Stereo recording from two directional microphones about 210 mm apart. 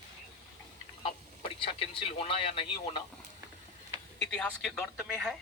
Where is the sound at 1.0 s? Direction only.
25° left (ahead or behind).